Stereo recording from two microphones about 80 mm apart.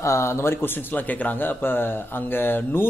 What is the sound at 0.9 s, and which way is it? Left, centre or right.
A man's voice, left.